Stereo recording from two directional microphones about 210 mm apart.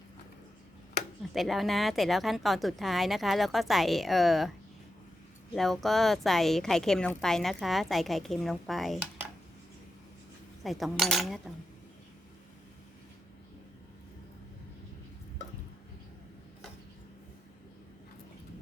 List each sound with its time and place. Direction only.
1.3 s a woman's voice: centre (ahead or behind)
5.5 s a woman's voice: centre (ahead or behind)
10.6 s a woman's voice: centre (ahead or behind)